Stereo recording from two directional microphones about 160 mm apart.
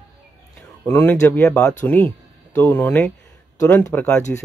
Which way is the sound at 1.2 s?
10° left (ahead or behind).